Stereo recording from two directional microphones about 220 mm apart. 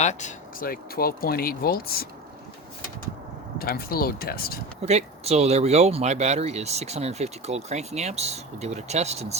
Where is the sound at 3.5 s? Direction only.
45° left (ahead or behind).